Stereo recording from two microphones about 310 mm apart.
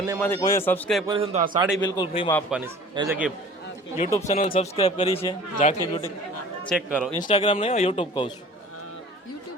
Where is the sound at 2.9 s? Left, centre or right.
Centre.